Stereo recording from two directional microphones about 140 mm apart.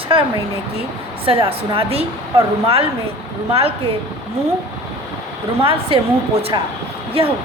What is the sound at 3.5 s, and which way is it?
Speech, 45° right (ahead or behind).